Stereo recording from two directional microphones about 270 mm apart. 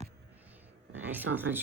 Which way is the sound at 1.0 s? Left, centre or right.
Centre.